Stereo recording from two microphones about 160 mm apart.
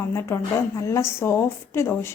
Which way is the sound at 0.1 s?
15° left (ahead or behind).